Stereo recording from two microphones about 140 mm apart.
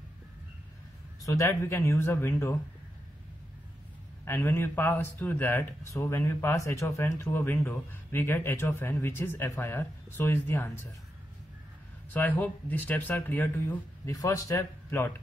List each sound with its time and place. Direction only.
1.2 s speech: 20° left (ahead or behind)
4.2 s speech: 15° left (ahead or behind)
12.1 s speech: 10° left (ahead or behind)
14.1 s speech: 25° left (ahead or behind)